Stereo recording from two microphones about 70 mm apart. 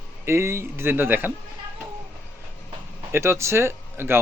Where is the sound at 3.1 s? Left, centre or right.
Right.